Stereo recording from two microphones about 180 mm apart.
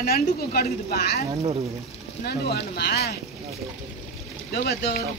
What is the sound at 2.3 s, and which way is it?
Speech, 65° left (ahead or behind).